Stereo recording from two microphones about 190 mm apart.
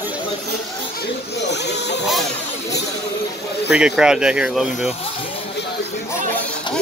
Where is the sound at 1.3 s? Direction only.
65° left (ahead or behind).